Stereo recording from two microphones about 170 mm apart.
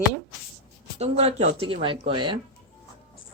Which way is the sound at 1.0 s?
35° right (ahead or behind).